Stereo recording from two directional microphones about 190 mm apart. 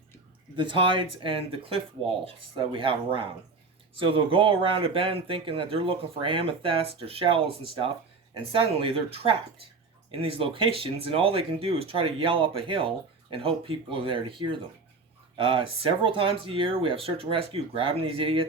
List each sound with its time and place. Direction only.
0.5 s speech: 25° right (ahead or behind)